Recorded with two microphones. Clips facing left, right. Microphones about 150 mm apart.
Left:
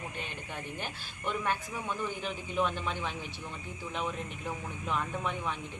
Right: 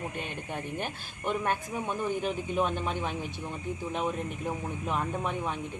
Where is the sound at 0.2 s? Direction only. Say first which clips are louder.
Right 5 dB; 50° right (ahead or behind).